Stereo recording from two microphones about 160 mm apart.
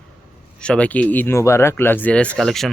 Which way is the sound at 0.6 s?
5° left (ahead or behind).